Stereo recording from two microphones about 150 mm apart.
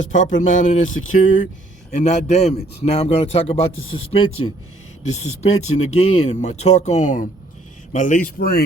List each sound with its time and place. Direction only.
0.0 s a man's voice: 55° left (ahead or behind); by 4.3 s 35° left (ahead or behind)
5.0 s a man's voice: 50° left (ahead or behind); by 8.6 s 85° left